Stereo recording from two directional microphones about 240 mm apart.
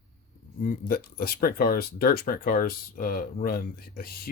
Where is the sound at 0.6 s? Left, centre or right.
Left.